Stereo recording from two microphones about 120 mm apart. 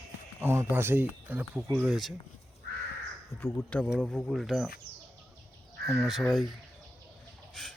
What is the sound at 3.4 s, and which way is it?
Speech, 20° left (ahead or behind).